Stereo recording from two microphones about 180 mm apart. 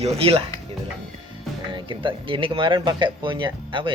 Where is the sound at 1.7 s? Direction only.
25° right (ahead or behind).